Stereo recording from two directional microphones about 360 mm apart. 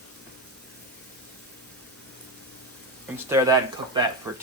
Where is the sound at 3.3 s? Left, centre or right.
Centre.